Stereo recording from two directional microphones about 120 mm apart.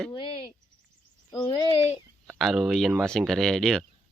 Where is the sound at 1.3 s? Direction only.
40° left (ahead or behind).